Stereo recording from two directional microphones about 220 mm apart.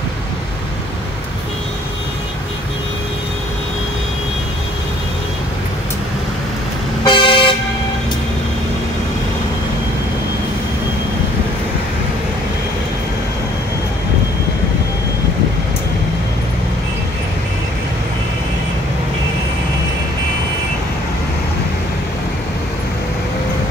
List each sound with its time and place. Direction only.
7.1 s vehicle: 20° left (ahead or behind)